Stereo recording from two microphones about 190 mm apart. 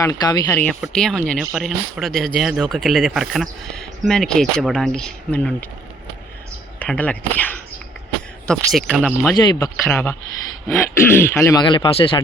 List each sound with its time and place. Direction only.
0.0 s speech: 20° left (ahead or behind)
0.5 s speech: 10° left (ahead or behind)
6.7 s speech: 10° left (ahead or behind)
9.3 s speech: 20° left (ahead or behind)
11.6 s speech: 25° left (ahead or behind)